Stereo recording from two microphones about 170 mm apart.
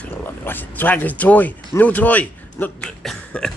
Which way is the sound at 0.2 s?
10° left (ahead or behind).